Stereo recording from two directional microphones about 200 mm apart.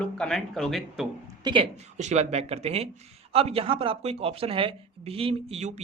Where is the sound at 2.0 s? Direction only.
35° right (ahead or behind).